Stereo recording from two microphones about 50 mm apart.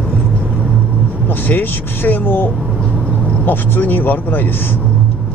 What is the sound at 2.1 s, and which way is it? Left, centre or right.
Speech, left.